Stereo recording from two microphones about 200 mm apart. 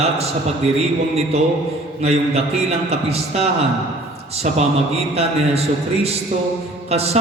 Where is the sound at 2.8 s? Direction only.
30° right (ahead or behind).